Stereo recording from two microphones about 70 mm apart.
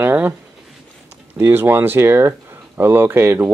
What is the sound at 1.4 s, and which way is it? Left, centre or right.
Speech, right.